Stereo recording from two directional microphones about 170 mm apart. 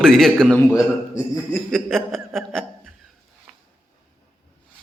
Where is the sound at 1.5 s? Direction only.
Centre (ahead or behind).